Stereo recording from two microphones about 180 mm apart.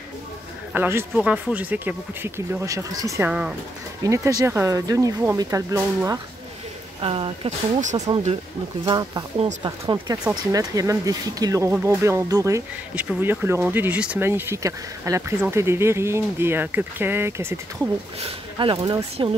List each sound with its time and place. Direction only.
0.7 s speech: 10° right (ahead or behind)
3.3 s speech: 5° right (ahead or behind)
4.0 s speech: 15° right (ahead or behind)
7.0 s speech: 30° right (ahead or behind)
8.8 s speech: 20° right (ahead or behind)
18.6 s speech: 30° right (ahead or behind)